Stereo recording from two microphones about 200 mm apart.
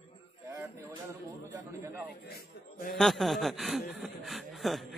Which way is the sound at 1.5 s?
15° right (ahead or behind).